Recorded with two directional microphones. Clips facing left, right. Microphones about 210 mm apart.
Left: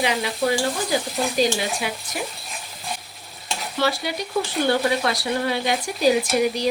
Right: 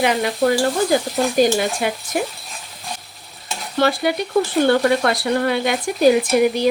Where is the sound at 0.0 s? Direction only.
50° right (ahead or behind).